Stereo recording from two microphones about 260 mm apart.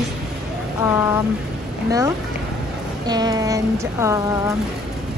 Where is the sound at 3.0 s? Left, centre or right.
Centre.